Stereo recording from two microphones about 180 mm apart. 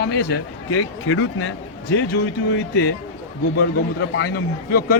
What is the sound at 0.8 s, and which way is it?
Speech, 90° left.